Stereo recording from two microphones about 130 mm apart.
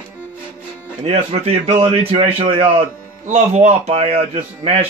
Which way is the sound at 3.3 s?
60° right (ahead or behind).